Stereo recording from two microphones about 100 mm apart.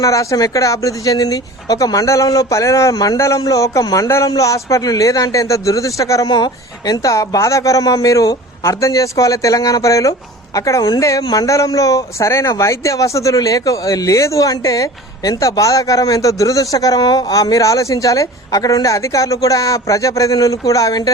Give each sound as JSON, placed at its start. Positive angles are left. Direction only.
{"t": 0.0, "sound": "a man's voice", "side_deg": 35}